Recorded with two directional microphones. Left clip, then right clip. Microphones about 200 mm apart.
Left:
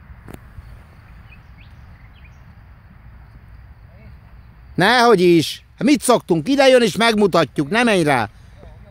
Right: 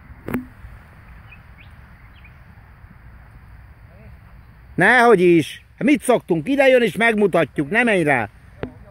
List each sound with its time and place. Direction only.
4.7 s speech: 5° left (ahead or behind)